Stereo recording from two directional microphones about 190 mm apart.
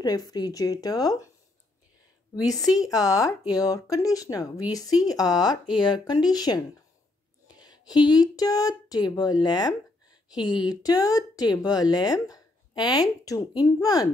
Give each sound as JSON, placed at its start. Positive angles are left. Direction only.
{"t": 0.0, "sound": "speech", "side_deg": 20}
{"t": 2.4, "sound": "speech", "side_deg": 20}